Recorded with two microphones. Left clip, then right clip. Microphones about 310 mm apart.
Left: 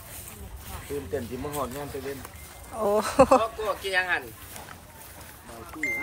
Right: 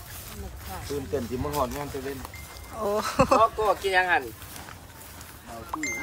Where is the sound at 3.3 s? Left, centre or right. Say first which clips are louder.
Right 4 dB; right.